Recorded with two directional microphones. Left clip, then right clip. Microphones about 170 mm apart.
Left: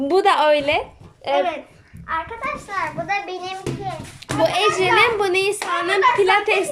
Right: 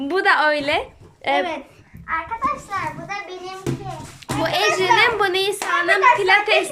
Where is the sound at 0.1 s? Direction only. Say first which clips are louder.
Left 1 dB; 20° left (ahead or behind); by 1.5 s 5° left (ahead or behind).